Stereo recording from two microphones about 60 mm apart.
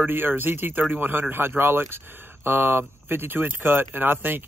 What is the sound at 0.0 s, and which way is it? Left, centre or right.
Speech, right.